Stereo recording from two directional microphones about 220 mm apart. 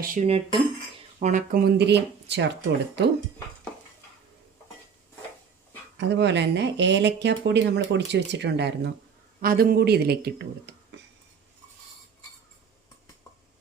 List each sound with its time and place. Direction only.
0.0 s speech: 35° right (ahead or behind); by 2.5 s 50° right (ahead or behind)
6.0 s speech: 50° right (ahead or behind)